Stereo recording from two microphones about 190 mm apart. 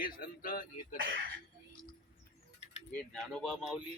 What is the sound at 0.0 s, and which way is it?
Speech, 50° left (ahead or behind).